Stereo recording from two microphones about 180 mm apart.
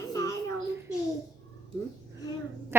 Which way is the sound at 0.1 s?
20° left (ahead or behind).